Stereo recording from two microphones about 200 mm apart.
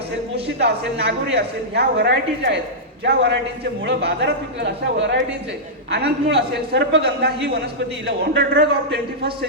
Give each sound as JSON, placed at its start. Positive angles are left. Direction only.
{"t": 0.6, "sound": "speech", "side_deg": -60}